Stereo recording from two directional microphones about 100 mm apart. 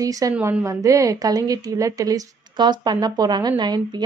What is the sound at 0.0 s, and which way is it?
A woman's voice, 35° right (ahead or behind).